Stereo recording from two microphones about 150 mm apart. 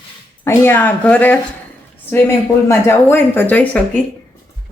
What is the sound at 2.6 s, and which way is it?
Speech, 15° left (ahead or behind).